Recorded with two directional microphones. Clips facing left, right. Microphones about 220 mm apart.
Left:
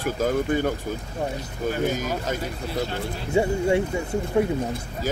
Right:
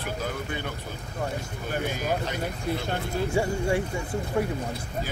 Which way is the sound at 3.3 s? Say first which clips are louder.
Left 7 dB; 20° left (ahead or behind).